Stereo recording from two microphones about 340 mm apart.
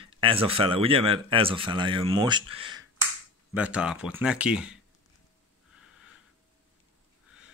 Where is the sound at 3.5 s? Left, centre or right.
Centre.